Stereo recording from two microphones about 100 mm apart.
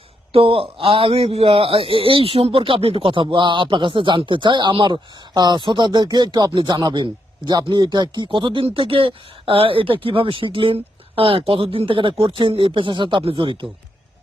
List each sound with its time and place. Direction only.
0.3 s a man's voice: 65° right (ahead or behind)